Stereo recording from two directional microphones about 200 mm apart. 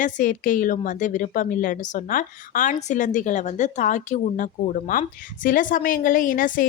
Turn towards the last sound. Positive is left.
turn(degrees=45)  # may be behind; listen again after turning